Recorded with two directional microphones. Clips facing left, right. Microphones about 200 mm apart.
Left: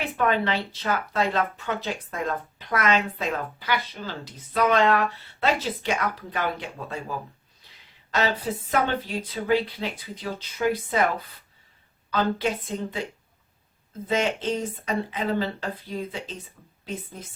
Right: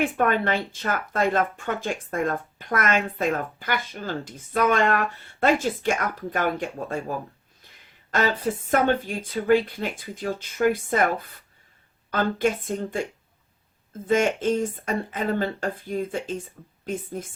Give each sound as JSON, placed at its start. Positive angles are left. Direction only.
{"t": 0.0, "sound": "speech", "side_deg": -50}
{"t": 12.1, "sound": "speech", "side_deg": -50}
{"t": 14.1, "sound": "speech", "side_deg": -50}